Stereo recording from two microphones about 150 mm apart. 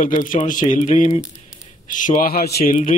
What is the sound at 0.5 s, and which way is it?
A man's voice, 60° left (ahead or behind).